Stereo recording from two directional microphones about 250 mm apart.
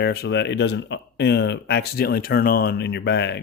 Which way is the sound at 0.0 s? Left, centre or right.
Left.